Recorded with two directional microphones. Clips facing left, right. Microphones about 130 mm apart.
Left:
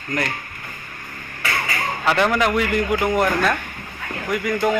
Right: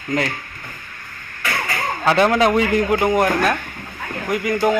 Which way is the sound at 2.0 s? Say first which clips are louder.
Right 4 dB; 15° right (ahead or behind).